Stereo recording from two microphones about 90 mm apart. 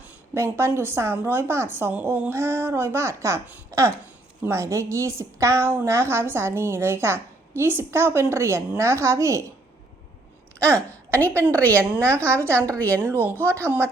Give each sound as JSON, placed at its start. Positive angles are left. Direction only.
{"t": 0.3, "sound": "a woman's voice", "side_deg": -30}
{"t": 3.7, "sound": "a sound", "side_deg": -35}
{"t": 4.4, "sound": "a woman's voice", "side_deg": -35}
{"t": 10.8, "sound": "a woman's voice", "side_deg": 15}
{"t": 13.0, "sound": "a woman's voice", "side_deg": -25}